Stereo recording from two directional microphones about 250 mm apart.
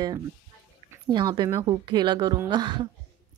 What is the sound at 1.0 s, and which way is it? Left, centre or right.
A woman's voice, centre.